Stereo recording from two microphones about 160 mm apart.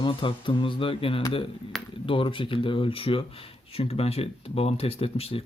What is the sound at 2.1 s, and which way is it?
Speech, 30° left (ahead or behind).